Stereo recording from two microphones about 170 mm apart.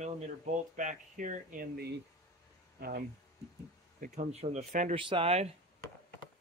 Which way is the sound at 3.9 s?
50° right (ahead or behind).